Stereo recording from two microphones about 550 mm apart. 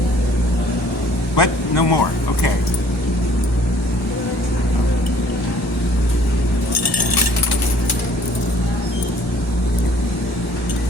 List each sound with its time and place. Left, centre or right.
1.4 s speech: left